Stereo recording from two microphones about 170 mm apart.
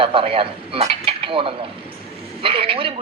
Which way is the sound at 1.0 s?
30° right (ahead or behind).